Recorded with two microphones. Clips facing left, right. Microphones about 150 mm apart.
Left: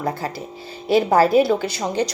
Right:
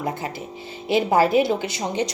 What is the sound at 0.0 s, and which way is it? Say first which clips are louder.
A woman's voice: left 2 dB; 20° right (ahead or behind).